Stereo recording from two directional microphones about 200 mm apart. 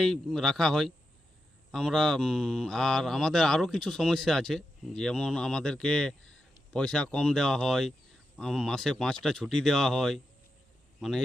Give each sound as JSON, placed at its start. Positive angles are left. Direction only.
{"t": 0.0, "sound": "speech", "side_deg": 0}